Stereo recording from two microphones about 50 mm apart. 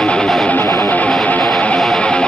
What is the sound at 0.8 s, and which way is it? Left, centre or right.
Music, left.